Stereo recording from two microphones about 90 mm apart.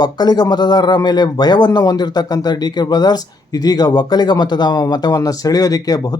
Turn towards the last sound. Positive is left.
turn(degrees=45)  # may be behind; listen again after turning